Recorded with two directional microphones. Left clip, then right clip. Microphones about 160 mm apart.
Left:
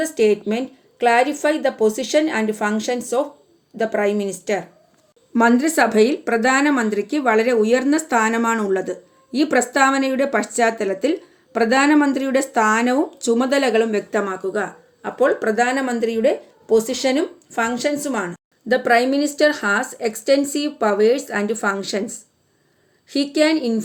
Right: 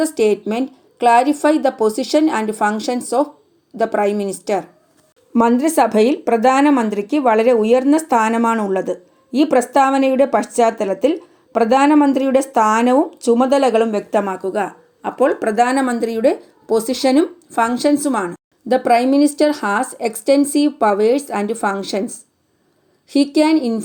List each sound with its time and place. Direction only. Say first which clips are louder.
0.0 s a woman's voice: right 2 dB; 30° right (ahead or behind)
5.3 s a woman's voice: right 2 dB; 20° right (ahead or behind)